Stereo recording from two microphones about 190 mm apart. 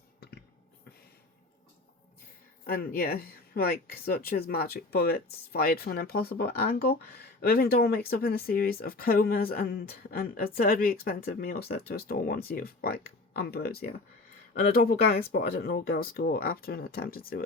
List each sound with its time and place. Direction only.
2.6 s speech: 50° left (ahead or behind)